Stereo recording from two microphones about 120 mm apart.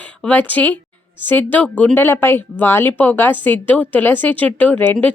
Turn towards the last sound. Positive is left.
turn(degrees=15)  # may be behind; listen again after turning